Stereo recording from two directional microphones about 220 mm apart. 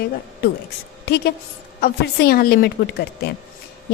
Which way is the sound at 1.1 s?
50° left (ahead or behind).